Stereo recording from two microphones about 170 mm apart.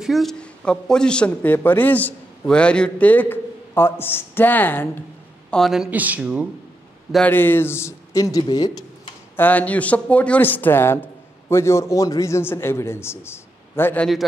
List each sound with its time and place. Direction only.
0.0 s a man's voice: centre (ahead or behind)
5.5 s speech: centre (ahead or behind)
7.1 s a man's voice: 5° left (ahead or behind); by 9.1 s 25° left (ahead or behind)
9.4 s a man's voice: 10° left (ahead or behind)